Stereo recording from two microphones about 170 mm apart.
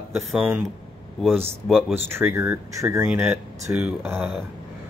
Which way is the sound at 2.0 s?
15° right (ahead or behind).